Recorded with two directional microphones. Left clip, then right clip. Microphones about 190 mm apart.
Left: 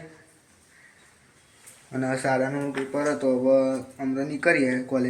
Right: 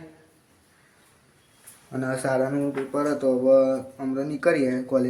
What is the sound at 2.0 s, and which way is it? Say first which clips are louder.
Speech: even; 10° right (ahead or behind).